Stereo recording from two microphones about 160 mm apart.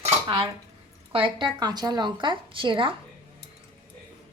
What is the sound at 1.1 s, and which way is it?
Speech, 30° right (ahead or behind).